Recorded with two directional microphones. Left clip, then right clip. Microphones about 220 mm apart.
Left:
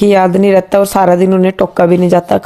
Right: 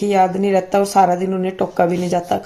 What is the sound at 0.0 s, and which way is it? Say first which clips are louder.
Speech: left 7 dB; 45° left (ahead or behind).